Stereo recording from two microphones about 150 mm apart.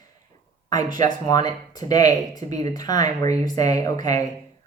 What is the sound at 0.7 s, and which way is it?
Speech, 25° left (ahead or behind).